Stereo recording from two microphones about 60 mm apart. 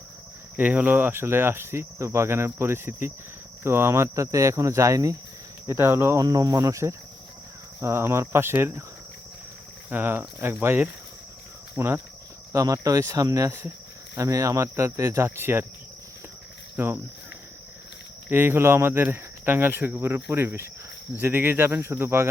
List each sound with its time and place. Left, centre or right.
0.5 s cricket: right
3.6 s speech: right
4.1 s speech: right
5.6 s speech: right
6.1 s cricket: right
7.8 s speech: right
9.9 s cricket: right
12.5 s cricket: right
14.2 s speech: right
16.7 s cricket: right
18.3 s cricket: right